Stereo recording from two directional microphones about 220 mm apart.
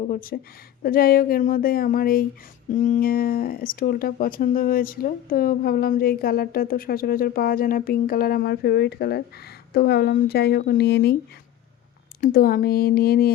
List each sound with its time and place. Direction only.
0.1 s speech: 40° left (ahead or behind)
12.2 s speech: 40° left (ahead or behind)